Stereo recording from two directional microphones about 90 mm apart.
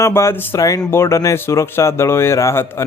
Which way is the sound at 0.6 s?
40° left (ahead or behind).